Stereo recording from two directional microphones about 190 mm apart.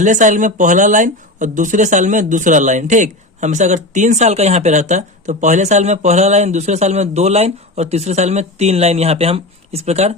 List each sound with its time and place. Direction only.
0.0 s speech: 40° right (ahead or behind)